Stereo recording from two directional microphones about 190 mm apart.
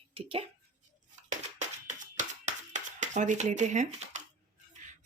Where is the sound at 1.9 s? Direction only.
35° right (ahead or behind).